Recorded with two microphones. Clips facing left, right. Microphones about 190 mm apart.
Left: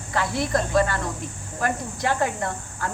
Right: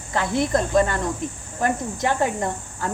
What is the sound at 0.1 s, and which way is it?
Speech, 20° right (ahead or behind).